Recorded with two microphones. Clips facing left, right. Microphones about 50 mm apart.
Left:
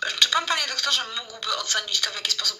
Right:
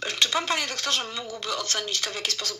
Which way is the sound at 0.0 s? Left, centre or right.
Right.